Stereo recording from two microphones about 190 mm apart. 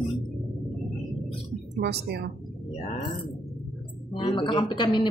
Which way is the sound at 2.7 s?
40° left (ahead or behind).